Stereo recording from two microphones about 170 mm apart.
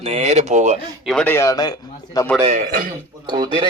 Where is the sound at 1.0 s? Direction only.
5° left (ahead or behind).